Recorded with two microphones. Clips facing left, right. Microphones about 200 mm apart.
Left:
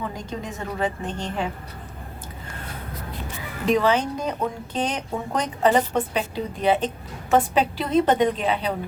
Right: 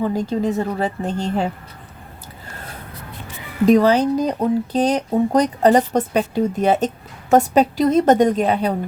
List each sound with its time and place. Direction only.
0.0 s a woman's voice: 35° right (ahead or behind)
3.7 s speech: 40° right (ahead or behind)